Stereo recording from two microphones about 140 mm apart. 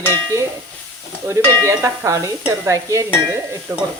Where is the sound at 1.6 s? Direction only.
20° right (ahead or behind).